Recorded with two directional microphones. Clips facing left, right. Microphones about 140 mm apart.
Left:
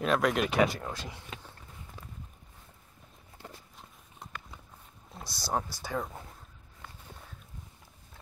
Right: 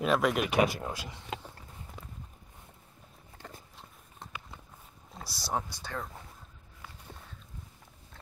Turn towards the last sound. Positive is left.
turn(degrees=0)  # may be behind; listen again after turning